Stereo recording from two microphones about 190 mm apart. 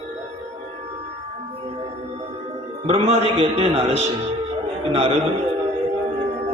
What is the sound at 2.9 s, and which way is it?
A man's voice, 35° right (ahead or behind).